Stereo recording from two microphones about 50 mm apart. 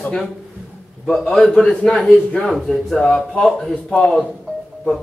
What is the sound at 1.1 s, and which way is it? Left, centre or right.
A man's voice, centre.